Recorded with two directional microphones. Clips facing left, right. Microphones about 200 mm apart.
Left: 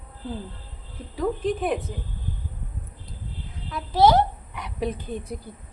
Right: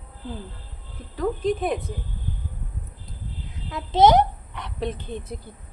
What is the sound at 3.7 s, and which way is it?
Speech, 20° right (ahead or behind).